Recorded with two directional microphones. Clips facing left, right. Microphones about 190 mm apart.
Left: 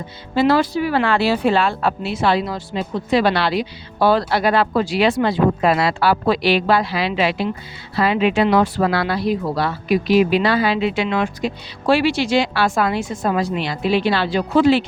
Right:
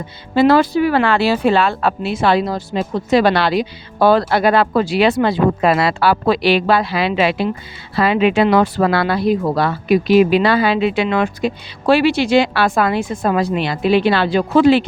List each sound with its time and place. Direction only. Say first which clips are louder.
0.3 s speech: right 4 dB; 55° right (ahead or behind); by 2.0 s 85° right
2.0 s speech: right 4 dB; 50° right (ahead or behind)
7.9 s speech: right 3 dB; 75° right (ahead or behind)